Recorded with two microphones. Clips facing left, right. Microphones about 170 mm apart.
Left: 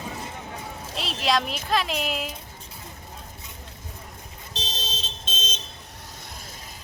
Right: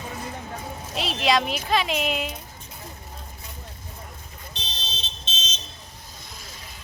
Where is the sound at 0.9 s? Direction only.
Centre (ahead or behind).